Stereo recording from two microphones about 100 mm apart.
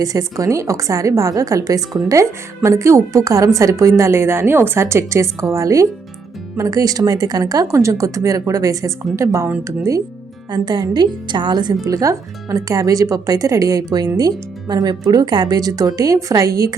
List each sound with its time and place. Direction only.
0.0 s a woman's voice: 35° right (ahead or behind)
10.5 s a woman's voice: 45° right (ahead or behind)
11.9 s speech: 35° right (ahead or behind)